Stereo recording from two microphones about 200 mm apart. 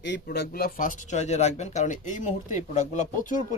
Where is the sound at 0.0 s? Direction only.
55° left (ahead or behind).